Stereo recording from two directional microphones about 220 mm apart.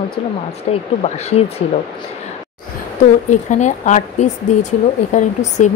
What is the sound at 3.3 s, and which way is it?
Speech, 35° left (ahead or behind).